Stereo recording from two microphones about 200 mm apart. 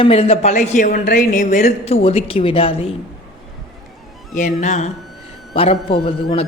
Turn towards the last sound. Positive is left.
turn(degrees=25)  # may be behind; listen again after turning